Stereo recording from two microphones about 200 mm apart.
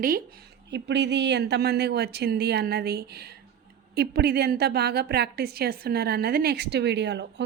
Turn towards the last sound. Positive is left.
turn(degrees=-60)  # may be behind; listen again after turning